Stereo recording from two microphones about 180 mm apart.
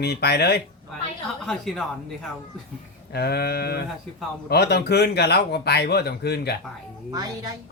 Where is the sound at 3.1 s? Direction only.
60° left (ahead or behind).